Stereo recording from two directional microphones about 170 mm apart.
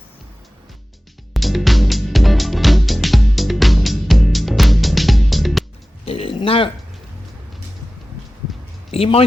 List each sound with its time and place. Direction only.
1.3 s music: centre (ahead or behind)
6.1 s a sound: 35° left (ahead or behind)
8.9 s speech: 35° left (ahead or behind)